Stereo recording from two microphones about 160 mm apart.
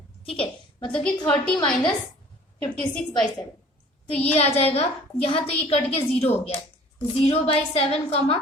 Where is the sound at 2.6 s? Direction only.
5° left (ahead or behind).